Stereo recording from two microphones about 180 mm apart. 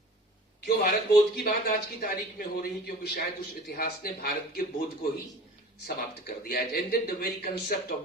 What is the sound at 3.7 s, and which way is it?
Speech, 55° left (ahead or behind).